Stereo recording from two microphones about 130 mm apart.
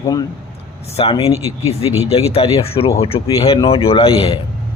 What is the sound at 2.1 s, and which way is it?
A man's voice, 50° left (ahead or behind).